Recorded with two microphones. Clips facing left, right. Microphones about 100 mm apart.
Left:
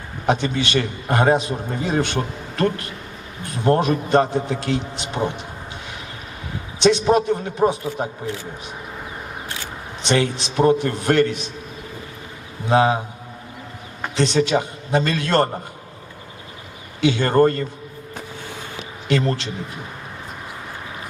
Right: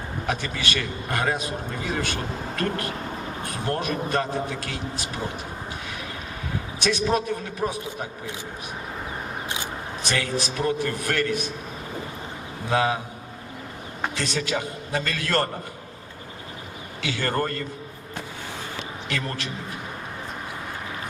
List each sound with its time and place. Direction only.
0.3 s a man's voice: 25° left (ahead or behind)
6.7 s a man's voice: 25° left (ahead or behind)
10.0 s a man's voice: 25° left (ahead or behind)
12.6 s a man's voice: 25° left (ahead or behind)
14.2 s a man's voice: 25° left (ahead or behind)
17.0 s a man's voice: 25° left (ahead or behind)
19.0 s a man's voice: 25° left (ahead or behind)